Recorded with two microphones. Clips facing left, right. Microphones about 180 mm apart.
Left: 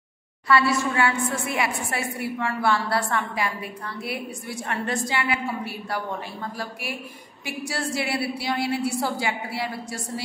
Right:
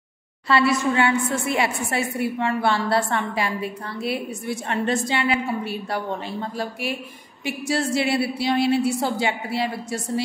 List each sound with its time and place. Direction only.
0.5 s a woman's voice: 20° right (ahead or behind)